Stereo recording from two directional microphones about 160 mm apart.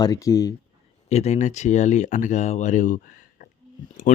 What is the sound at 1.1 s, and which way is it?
Speech, 40° left (ahead or behind).